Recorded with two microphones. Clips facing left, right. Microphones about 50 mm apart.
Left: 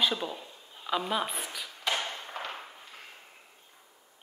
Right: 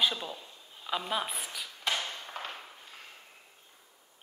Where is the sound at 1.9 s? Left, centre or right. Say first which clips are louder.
Left 3 dB; left.